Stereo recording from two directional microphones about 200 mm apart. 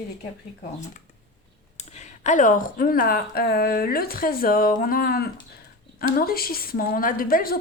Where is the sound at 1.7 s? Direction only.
35° left (ahead or behind).